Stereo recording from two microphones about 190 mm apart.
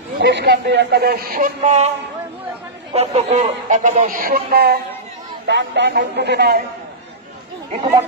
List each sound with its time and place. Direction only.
0.2 s a man's voice: 65° right (ahead or behind); by 1.9 s 35° right (ahead or behind)
2.9 s a man's voice: 35° right (ahead or behind); by 4.7 s 50° right (ahead or behind)
5.5 s a man's voice: 65° right (ahead or behind)